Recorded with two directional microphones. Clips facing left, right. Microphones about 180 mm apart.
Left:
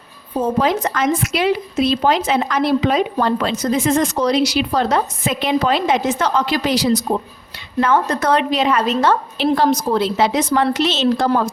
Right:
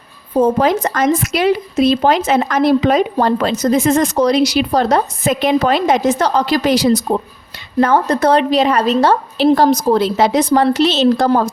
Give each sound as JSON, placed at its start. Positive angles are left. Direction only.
{"t": 0.4, "sound": "speech", "side_deg": -45}
{"t": 7.8, "sound": "a woman's voice", "side_deg": -40}